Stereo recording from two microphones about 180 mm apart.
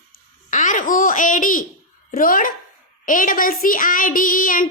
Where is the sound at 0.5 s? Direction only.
45° left (ahead or behind).